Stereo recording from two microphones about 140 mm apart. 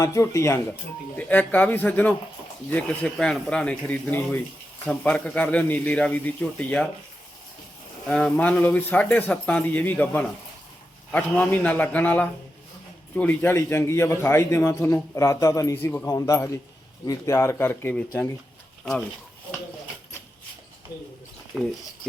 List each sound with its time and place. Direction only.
0.0 s a man's voice: 20° left (ahead or behind)
8.0 s a man's voice: 5° left (ahead or behind)
21.5 s speech: centre (ahead or behind)